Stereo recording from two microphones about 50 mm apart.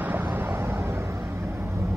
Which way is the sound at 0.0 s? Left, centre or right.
Right.